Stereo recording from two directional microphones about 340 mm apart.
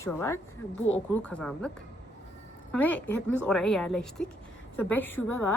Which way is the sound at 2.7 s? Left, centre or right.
Centre.